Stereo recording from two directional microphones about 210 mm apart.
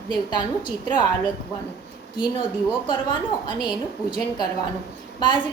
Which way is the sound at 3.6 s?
20° left (ahead or behind).